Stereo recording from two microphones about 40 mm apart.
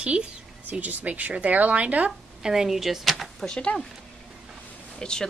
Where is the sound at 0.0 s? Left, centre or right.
Right.